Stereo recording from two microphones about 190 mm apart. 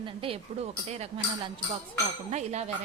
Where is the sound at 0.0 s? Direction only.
30° right (ahead or behind).